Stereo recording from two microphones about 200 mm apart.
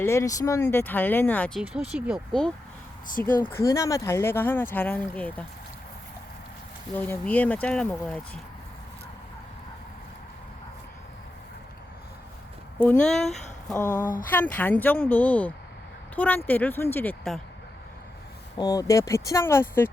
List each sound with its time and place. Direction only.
0.0 s speech: 15° left (ahead or behind)
3.1 s speech: 45° left (ahead or behind)
3.5 s speech: 15° left (ahead or behind)
6.9 s speech: 10° left (ahead or behind)
12.8 s speech: 5° left (ahead or behind)
13.7 s speech: 15° left (ahead or behind)
18.5 s speech: 20° left (ahead or behind)